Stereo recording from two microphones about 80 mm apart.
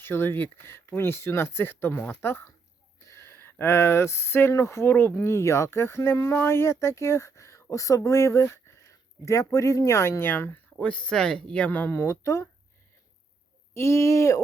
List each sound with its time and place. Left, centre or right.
0.0 s speech: left
10.8 s speech: centre
11.7 s speech: left
13.7 s speech: left